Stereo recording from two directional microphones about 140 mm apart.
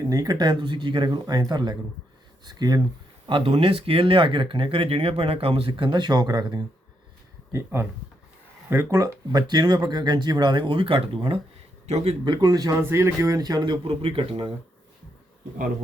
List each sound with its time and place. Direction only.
0.1 s speech: 25° right (ahead or behind)
7.5 s speech: 15° right (ahead or behind); by 12.1 s 50° right (ahead or behind)
12.2 s speech: 30° right (ahead or behind)
12.8 s speech: 15° right (ahead or behind); by 14.5 s 40° right (ahead or behind)